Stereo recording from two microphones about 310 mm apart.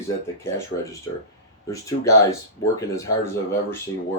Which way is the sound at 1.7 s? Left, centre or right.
Centre.